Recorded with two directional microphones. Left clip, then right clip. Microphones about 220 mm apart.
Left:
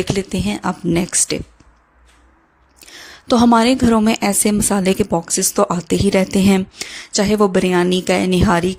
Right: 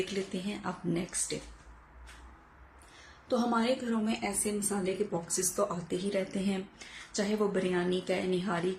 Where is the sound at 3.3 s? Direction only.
45° left (ahead or behind).